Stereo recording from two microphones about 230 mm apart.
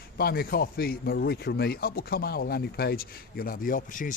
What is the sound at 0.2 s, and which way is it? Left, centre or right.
Speech, left.